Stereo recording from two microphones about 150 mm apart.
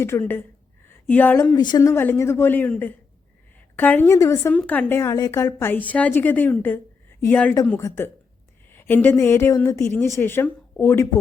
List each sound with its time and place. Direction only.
0.0 s a woman's voice: 15° left (ahead or behind)
1.5 s a woman's voice: 30° left (ahead or behind)
1.8 s a woman's voice: 15° left (ahead or behind)
4.5 s a woman's voice: 10° left (ahead or behind)